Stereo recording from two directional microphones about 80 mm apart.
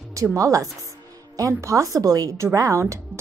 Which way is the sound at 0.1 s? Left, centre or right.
Right.